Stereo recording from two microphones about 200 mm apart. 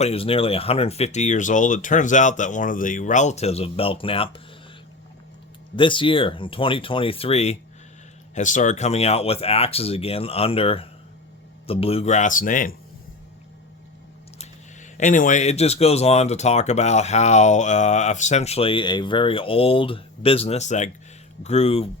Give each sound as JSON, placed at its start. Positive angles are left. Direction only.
{"t": 0.0, "sound": "speech", "side_deg": 30}
{"t": 5.7, "sound": "speech", "side_deg": 25}
{"t": 14.3, "sound": "speech", "side_deg": 35}